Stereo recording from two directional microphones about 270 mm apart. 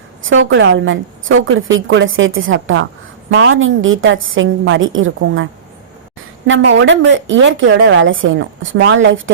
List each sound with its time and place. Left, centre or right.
0.3 s a woman's voice: right
6.5 s a woman's voice: right